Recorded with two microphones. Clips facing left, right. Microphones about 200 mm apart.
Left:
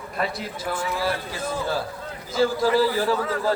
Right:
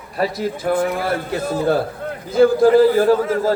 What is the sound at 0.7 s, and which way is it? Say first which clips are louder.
A man's voice: right 6 dB; 55° right (ahead or behind).